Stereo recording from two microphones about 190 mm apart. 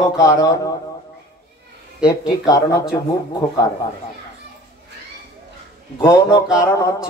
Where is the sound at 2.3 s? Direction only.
20° left (ahead or behind).